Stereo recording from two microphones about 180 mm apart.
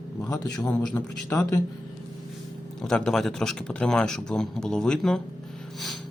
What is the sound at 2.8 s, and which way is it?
Speech, 5° left (ahead or behind).